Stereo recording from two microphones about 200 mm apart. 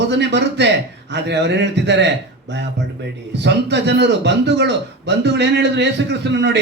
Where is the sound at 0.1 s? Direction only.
60° right (ahead or behind).